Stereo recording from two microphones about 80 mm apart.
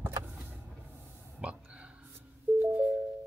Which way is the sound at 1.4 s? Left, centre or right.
Centre.